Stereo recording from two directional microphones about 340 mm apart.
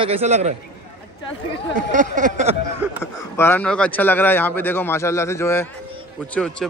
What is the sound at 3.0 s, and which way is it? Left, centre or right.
Speech, centre.